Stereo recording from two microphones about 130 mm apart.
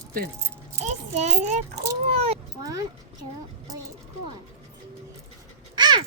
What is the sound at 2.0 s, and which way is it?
Vehicle, 55° right (ahead or behind).